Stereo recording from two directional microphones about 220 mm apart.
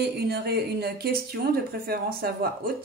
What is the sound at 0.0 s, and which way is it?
A woman's voice, 45° right (ahead or behind).